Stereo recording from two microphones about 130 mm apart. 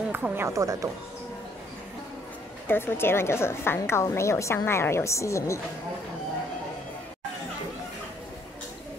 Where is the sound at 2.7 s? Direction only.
15° left (ahead or behind).